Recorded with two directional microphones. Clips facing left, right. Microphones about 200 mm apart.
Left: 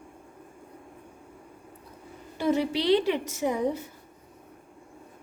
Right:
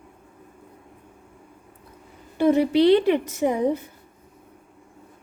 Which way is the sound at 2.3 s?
55° right (ahead or behind).